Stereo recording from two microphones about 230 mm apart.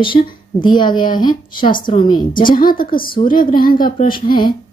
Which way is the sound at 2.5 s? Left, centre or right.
Left.